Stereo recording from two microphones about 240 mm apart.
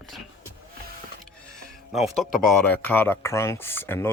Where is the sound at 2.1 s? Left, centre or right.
Centre.